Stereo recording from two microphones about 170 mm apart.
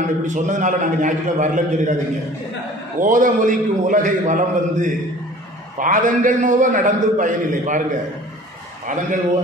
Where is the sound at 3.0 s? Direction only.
50° right (ahead or behind).